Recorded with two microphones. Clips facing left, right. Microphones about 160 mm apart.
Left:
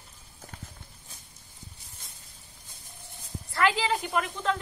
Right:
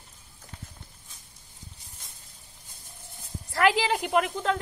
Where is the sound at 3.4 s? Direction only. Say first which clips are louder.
Right 3 dB; 90° right.